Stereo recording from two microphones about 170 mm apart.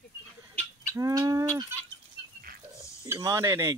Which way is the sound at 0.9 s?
20° right (ahead or behind).